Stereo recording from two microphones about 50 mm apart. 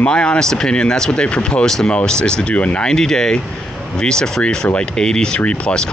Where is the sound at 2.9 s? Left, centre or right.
Centre.